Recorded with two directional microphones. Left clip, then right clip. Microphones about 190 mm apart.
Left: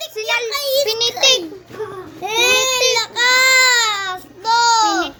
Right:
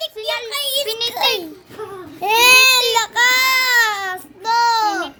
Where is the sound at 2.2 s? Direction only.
65° right (ahead or behind).